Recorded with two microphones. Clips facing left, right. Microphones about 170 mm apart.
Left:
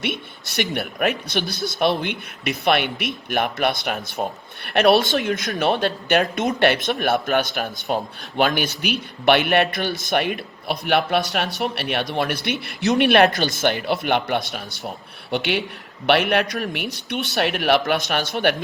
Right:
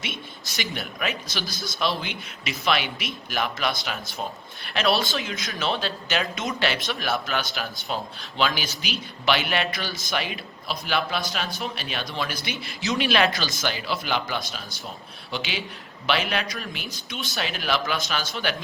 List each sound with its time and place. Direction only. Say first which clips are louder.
0.0 s speech: left 8 dB; 60° left (ahead or behind)